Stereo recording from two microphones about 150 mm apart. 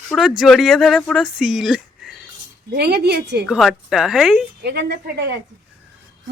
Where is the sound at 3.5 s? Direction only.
5° right (ahead or behind).